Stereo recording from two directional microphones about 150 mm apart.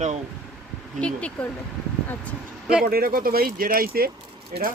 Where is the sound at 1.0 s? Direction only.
10° left (ahead or behind).